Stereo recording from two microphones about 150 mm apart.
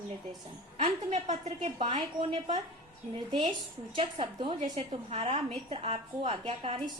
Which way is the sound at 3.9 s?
35° right (ahead or behind).